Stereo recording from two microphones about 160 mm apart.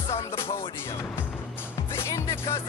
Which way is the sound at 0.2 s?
35° left (ahead or behind).